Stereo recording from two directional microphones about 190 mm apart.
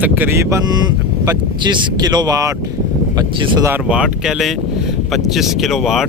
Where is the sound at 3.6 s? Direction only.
10° right (ahead or behind).